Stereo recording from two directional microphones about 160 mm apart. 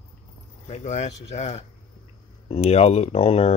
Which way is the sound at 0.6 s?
45° left (ahead or behind).